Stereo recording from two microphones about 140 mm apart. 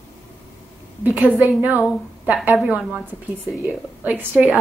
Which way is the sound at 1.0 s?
10° right (ahead or behind).